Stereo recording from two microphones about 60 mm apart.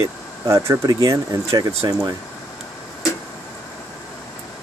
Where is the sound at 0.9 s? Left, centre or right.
Right.